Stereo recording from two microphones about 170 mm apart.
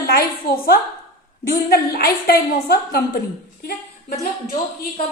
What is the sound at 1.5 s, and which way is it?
A woman's voice, 65° left (ahead or behind).